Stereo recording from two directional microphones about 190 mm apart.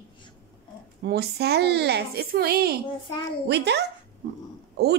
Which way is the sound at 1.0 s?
60° right (ahead or behind).